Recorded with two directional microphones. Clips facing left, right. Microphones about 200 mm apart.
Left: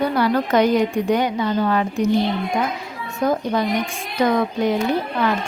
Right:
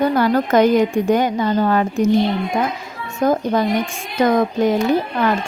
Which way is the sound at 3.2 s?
45° right (ahead or behind).